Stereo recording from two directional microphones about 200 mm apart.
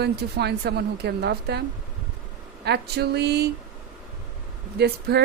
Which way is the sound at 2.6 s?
55° right (ahead or behind).